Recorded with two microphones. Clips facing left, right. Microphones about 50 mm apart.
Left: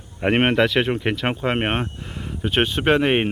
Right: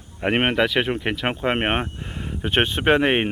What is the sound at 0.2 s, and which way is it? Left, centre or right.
Speech, centre.